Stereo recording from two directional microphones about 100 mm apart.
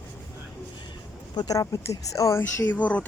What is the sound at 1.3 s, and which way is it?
A woman's voice, 40° left (ahead or behind).